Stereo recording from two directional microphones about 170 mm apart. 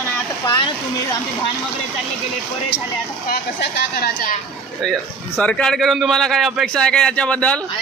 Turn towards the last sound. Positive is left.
turn(degrees=5)  # may be behind; listen again after turning